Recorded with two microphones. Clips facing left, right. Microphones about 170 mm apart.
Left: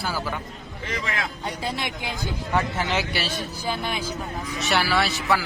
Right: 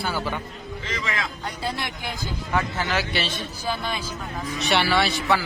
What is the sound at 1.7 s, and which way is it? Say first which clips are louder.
A man's voice: left 1 dB; 20° left (ahead or behind).